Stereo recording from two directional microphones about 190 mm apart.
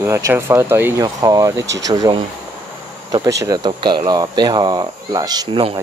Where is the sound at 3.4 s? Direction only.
20° right (ahead or behind).